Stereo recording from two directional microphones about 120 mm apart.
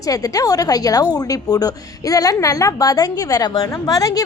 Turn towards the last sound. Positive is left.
turn(degrees=30)  # may be behind; listen again after turning